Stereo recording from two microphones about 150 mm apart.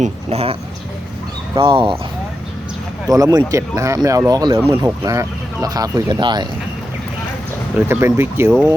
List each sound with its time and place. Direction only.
0.0 s speech: 45° right (ahead or behind)
1.5 s speech: 35° right (ahead or behind)
3.1 s speech: 25° right (ahead or behind)
4.7 s speech: 20° right (ahead or behind)
7.8 s speech: 15° right (ahead or behind)